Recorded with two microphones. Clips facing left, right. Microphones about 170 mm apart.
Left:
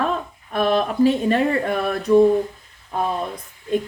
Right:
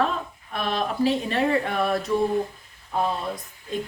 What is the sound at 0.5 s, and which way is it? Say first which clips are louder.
A woman's voice: left 7 dB; 50° left (ahead or behind).